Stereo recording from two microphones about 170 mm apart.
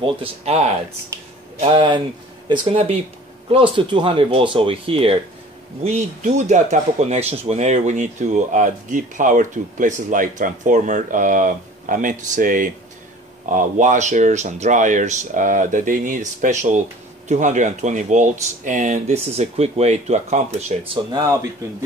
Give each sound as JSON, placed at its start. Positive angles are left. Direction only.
{"t": 0.0, "sound": "speech", "side_deg": -35}
{"t": 5.9, "sound": "speech", "side_deg": -45}
{"t": 21.1, "sound": "speech", "side_deg": -20}